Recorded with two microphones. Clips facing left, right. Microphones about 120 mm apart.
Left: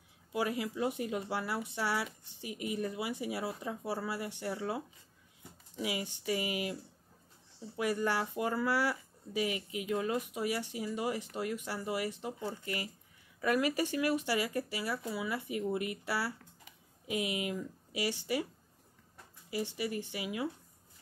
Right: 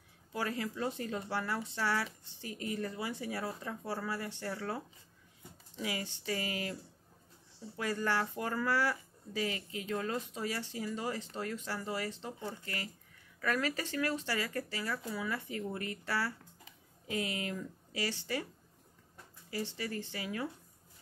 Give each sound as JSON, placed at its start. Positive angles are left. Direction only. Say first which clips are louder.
{"t": 0.3, "sound": "speech", "louder": "left 3 dB", "side_deg": 15}
{"t": 19.5, "sound": "speech", "louder": "left 3 dB", "side_deg": 15}